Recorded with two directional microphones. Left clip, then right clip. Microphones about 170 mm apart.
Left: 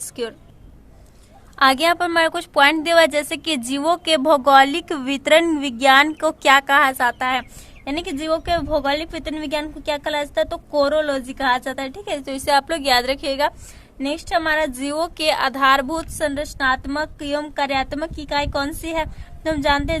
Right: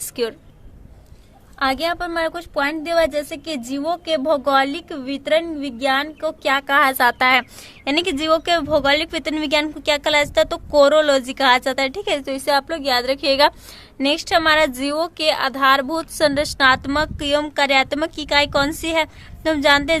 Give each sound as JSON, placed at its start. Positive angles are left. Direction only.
{"t": 0.2, "sound": "speech", "side_deg": -10}
{"t": 1.5, "sound": "a woman's voice", "side_deg": 10}
{"t": 6.7, "sound": "speech", "side_deg": -5}
{"t": 13.2, "sound": "a woman's voice", "side_deg": -15}
{"t": 16.1, "sound": "a woman's voice", "side_deg": -25}